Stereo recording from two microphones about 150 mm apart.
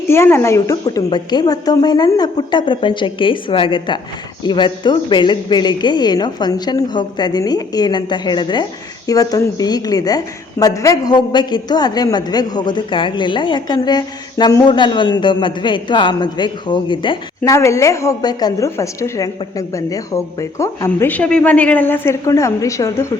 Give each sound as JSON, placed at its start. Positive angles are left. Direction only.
{"t": 0.1, "sound": "a woman's voice", "side_deg": 15}
{"t": 17.5, "sound": "a woman's voice", "side_deg": 20}